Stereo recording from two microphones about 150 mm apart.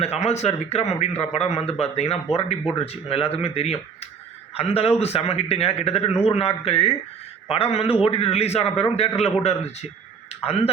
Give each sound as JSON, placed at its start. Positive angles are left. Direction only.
{"t": 0.0, "sound": "a man's voice", "side_deg": 45}